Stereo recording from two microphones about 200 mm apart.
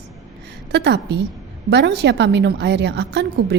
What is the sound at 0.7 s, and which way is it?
A woman's voice, 60° right (ahead or behind).